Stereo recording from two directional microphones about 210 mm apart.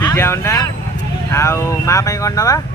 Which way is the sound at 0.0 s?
10° left (ahead or behind).